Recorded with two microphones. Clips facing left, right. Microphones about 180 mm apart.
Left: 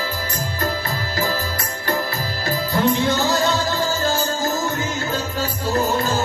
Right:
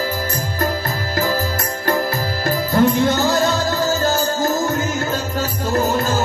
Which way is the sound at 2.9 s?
50° right (ahead or behind).